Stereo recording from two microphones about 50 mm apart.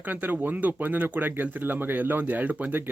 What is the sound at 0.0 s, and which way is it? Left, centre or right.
Speech, right.